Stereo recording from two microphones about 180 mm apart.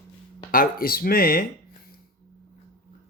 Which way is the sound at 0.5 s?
55° left (ahead or behind).